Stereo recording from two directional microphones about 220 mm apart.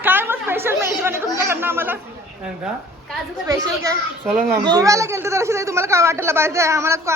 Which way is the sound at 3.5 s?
15° right (ahead or behind).